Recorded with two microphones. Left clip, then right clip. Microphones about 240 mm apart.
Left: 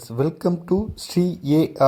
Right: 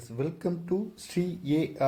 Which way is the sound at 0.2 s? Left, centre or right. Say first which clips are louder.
Left 10 dB; left.